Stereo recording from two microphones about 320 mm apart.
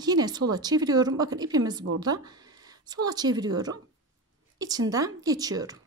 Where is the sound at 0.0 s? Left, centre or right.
Centre.